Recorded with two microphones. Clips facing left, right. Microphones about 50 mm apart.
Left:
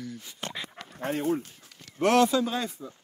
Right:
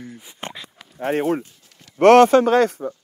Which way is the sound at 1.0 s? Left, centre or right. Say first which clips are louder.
Right 7 dB; right.